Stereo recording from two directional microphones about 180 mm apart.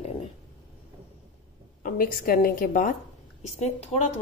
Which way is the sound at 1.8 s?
50° left (ahead or behind).